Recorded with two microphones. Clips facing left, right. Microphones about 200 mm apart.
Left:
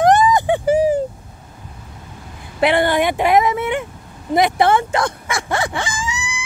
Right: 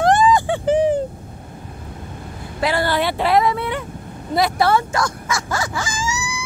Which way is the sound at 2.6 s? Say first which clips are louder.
Left 4 dB; 20° left (ahead or behind).